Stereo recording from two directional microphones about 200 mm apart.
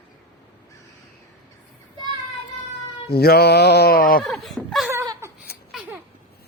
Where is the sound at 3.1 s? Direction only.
50° left (ahead or behind).